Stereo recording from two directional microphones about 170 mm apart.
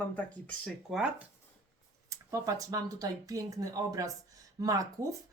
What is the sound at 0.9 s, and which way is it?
Speech, 5° right (ahead or behind).